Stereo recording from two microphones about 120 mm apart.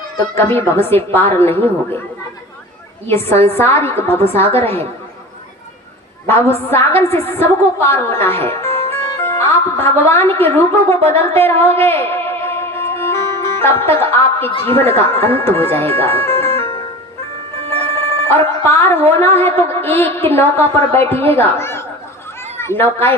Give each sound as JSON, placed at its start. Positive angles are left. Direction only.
{"t": 0.3, "sound": "a woman's voice", "side_deg": 20}
{"t": 3.1, "sound": "a woman's voice", "side_deg": 20}
{"t": 6.2, "sound": "a woman's voice", "side_deg": 20}
{"t": 17.7, "sound": "music", "side_deg": -55}
{"t": 18.6, "sound": "a woman's voice", "side_deg": 20}